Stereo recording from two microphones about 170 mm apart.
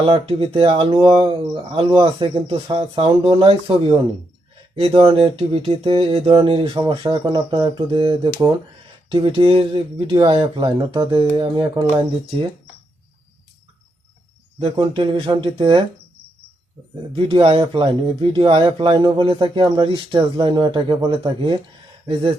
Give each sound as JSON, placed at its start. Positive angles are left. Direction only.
{"t": 0.0, "sound": "speech", "side_deg": -30}
{"t": 14.6, "sound": "speech", "side_deg": -30}
{"t": 17.1, "sound": "speech", "side_deg": -30}